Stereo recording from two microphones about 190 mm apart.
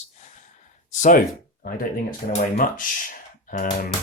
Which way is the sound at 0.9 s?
40° left (ahead or behind).